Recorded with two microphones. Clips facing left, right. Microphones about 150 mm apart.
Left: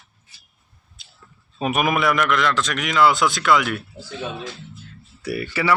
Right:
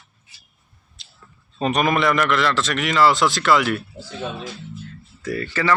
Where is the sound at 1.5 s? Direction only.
5° left (ahead or behind).